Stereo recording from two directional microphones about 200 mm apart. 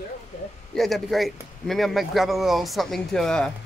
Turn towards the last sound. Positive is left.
turn(degrees=5)  # may be behind; listen again after turning